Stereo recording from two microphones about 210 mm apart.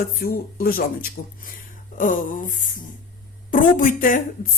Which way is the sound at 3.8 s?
40° left (ahead or behind).